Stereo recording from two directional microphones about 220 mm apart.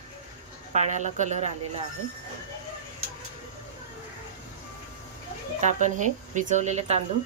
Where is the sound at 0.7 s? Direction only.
35° right (ahead or behind).